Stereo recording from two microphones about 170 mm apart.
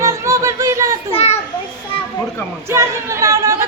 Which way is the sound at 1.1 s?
40° left (ahead or behind).